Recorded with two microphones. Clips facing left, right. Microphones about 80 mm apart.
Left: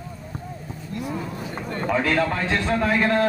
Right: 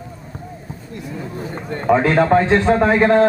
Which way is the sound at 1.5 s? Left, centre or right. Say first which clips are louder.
Right 8 dB; right.